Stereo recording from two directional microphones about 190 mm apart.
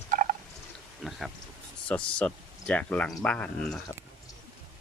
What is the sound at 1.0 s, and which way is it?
Speech, centre (ahead or behind).